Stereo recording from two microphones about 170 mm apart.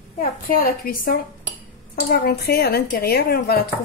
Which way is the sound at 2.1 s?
65° left (ahead or behind).